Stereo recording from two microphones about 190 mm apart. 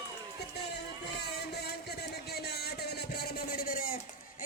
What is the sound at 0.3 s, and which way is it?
Vehicle, 60° left (ahead or behind).